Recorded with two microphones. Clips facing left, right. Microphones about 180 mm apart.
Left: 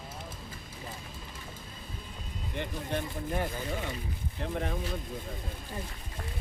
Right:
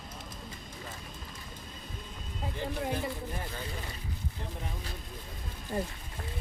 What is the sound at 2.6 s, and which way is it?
Speech, 70° left (ahead or behind).